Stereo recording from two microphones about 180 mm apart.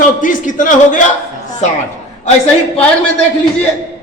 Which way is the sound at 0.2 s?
45° left (ahead or behind).